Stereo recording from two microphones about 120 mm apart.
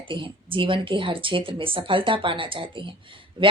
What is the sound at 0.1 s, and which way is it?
Speech, 45° right (ahead or behind).